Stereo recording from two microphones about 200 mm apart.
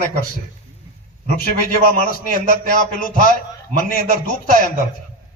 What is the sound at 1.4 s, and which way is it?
A man's voice, 45° left (ahead or behind).